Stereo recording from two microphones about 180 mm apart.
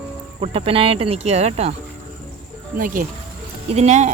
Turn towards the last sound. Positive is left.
turn(degrees=-40)  # may be behind; listen again after turning